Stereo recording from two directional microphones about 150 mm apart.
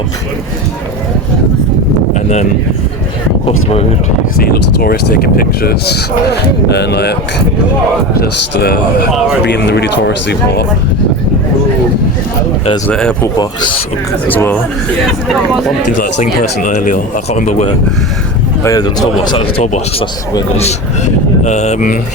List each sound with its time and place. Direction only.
3.4 s speech: 40° left (ahead or behind)
4.4 s speech: 90° left
12.9 s speech: 5° left (ahead or behind)
13.2 s speech: 30° left (ahead or behind)
14.3 s speech: 10° left (ahead or behind)
16.0 s speech: 55° left (ahead or behind)
18.6 s speech: 25° left (ahead or behind); by 20.1 s 45° left (ahead or behind)
21.4 s speech: 50° left (ahead or behind)